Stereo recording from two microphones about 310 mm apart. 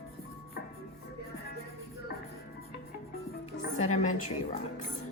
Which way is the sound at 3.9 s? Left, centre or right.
Left.